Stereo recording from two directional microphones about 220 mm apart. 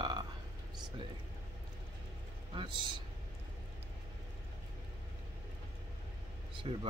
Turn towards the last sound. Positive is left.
turn(degrees=-30)  # may be behind; listen again after turning